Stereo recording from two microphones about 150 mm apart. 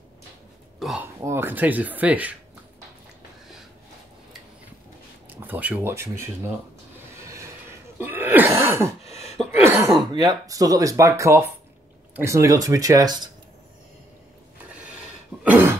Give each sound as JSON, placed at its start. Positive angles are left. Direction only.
{"t": 0.7, "sound": "speech", "side_deg": 0}
{"t": 1.2, "sound": "speech", "side_deg": -15}
{"t": 5.3, "sound": "speech", "side_deg": -10}
{"t": 7.2, "sound": "a sound", "side_deg": -20}
{"t": 8.0, "sound": "speech", "side_deg": -15}
{"t": 9.5, "sound": "cough", "side_deg": -20}
{"t": 10.1, "sound": "speech", "side_deg": -25}
{"t": 14.7, "sound": "a sound", "side_deg": -10}
{"t": 15.4, "sound": "cough", "side_deg": -15}